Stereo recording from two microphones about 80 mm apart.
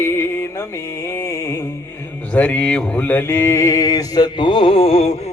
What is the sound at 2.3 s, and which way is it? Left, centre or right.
A man's voice, centre.